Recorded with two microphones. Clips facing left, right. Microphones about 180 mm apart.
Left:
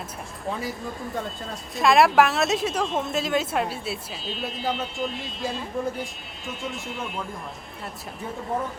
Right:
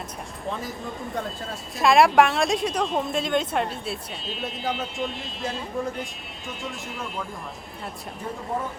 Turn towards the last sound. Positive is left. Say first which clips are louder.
# left 1 dB
turn(degrees=0)  # may be behind; listen again after turning